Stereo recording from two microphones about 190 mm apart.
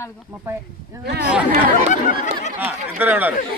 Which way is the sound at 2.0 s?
40° left (ahead or behind).